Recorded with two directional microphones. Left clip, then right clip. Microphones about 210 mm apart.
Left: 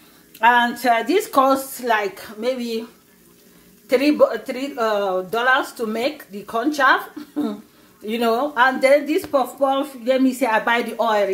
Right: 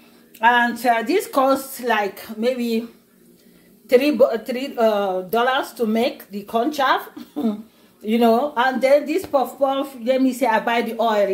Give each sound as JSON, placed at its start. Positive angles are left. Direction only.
{"t": 0.4, "sound": "speech", "side_deg": 0}
{"t": 3.9, "sound": "speech", "side_deg": -5}